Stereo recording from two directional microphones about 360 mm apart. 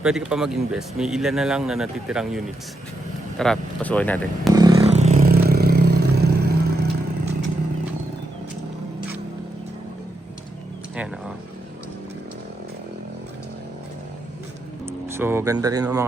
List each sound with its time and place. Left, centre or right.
0.0 s speech: centre
4.5 s vehicle: centre; by 6.8 s right
15.0 s speech: centre